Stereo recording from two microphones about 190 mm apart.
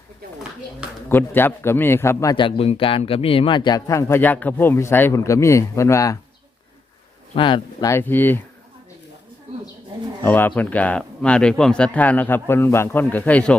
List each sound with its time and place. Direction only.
1.0 s speech: 10° left (ahead or behind)
2.3 s speech: 25° left (ahead or behind)
7.3 s speech: 25° left (ahead or behind)
10.2 s speech: 10° left (ahead or behind)